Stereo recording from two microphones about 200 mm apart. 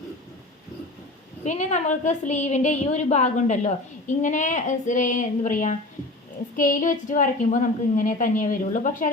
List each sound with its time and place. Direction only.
1.5 s a woman's voice: 35° left (ahead or behind)